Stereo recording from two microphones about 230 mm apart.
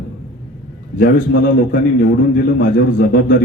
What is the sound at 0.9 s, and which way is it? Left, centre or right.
A man's voice, left.